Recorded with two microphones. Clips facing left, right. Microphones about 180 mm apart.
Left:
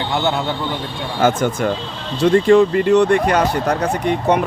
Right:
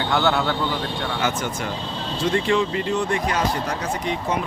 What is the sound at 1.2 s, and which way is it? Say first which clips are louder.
Speech: left 12 dB; 55° left (ahead or behind).